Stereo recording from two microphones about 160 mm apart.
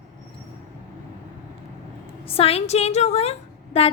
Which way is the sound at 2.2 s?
35° left (ahead or behind).